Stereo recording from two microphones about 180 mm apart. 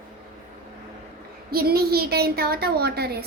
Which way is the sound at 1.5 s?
60° right (ahead or behind).